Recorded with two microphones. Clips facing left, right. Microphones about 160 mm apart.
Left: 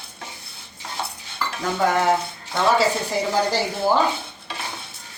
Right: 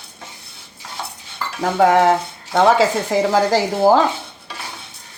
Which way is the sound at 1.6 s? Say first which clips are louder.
Right 7 dB; 90° right.